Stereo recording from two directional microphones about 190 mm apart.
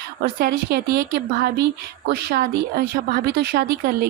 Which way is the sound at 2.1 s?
50° right (ahead or behind).